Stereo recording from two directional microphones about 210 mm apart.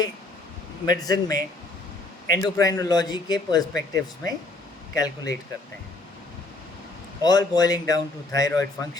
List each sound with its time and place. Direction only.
0.9 s speech: 20° left (ahead or behind)
2.4 s speech: 15° left (ahead or behind)
7.2 s speech: 20° left (ahead or behind)